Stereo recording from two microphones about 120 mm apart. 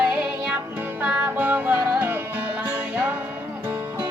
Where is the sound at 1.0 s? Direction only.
15° right (ahead or behind).